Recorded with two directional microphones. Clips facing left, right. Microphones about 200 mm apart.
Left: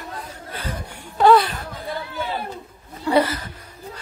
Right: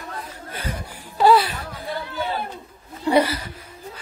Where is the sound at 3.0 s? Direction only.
15° right (ahead or behind).